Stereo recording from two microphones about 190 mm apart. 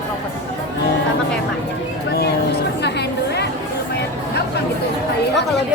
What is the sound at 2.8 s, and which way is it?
Chatter, 60° left (ahead or behind).